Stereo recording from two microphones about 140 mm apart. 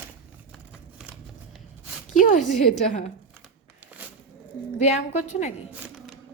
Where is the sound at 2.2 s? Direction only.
75° left (ahead or behind).